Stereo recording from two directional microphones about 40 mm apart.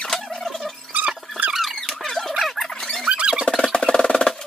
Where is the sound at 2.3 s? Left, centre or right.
Centre.